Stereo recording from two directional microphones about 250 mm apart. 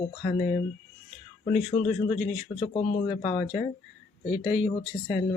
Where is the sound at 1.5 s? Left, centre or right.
Left.